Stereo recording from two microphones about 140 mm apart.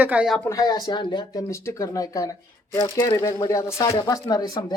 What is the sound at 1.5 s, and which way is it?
Speech, 20° left (ahead or behind).